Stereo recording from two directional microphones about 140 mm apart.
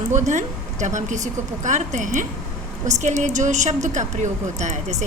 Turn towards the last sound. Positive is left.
turn(degrees=-55)  # may be behind; listen again after turning